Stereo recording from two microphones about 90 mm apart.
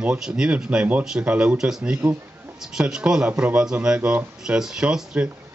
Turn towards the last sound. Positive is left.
turn(degrees=-10)  # may be behind; listen again after turning